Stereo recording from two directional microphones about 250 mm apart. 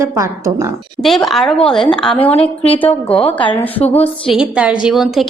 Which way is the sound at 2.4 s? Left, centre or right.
Left.